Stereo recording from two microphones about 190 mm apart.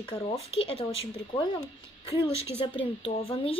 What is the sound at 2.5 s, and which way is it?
Speech, 30° left (ahead or behind).